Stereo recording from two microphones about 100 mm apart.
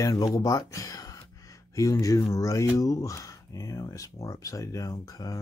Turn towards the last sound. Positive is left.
turn(degrees=35)  # may be behind; listen again after turning